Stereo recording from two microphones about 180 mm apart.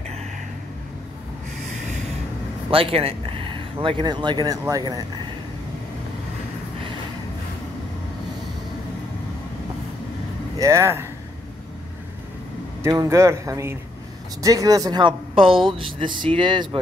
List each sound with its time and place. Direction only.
2.7 s speech: 30° right (ahead or behind)
10.6 s speech: 15° right (ahead or behind)
12.8 s speech: 15° right (ahead or behind)